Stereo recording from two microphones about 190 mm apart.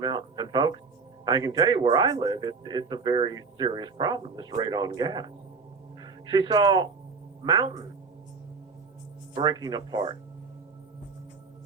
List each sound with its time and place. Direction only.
0.0 s speech: 20° right (ahead or behind)
9.3 s speech: 20° right (ahead or behind)